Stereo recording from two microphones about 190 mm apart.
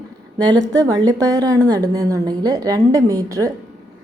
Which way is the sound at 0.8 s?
20° right (ahead or behind).